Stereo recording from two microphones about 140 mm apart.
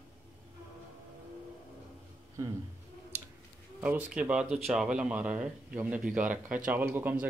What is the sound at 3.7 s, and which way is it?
Speech, 10° right (ahead or behind).